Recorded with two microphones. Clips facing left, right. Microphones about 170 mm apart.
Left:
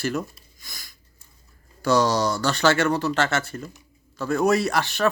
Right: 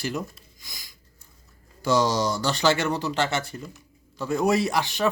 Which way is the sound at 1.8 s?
20° right (ahead or behind).